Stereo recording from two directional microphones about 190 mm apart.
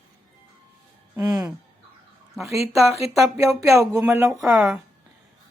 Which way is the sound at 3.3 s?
15° right (ahead or behind).